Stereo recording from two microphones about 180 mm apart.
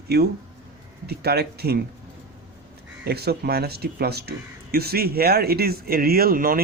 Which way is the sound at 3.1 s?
60° right (ahead or behind).